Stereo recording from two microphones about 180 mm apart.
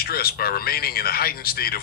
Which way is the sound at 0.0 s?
55° left (ahead or behind).